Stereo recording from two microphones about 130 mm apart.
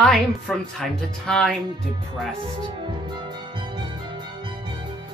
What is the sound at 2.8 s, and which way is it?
Music, 35° right (ahead or behind).